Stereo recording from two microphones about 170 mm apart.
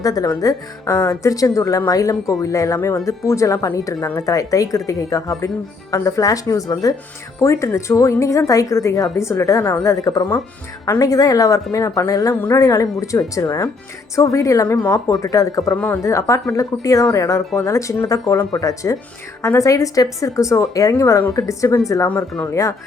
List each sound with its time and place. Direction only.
0.0 s a woman's voice: 20° left (ahead or behind)